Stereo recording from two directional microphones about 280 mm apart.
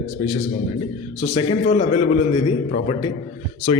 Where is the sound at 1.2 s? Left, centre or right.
Left.